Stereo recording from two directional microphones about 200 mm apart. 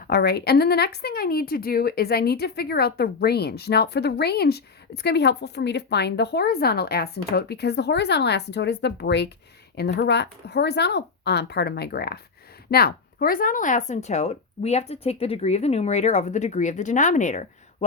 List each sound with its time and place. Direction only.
0.1 s a woman's voice: 55° left (ahead or behind); by 17.8 s 35° left (ahead or behind)